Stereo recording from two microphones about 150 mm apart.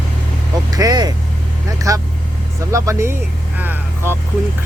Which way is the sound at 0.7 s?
25° right (ahead or behind).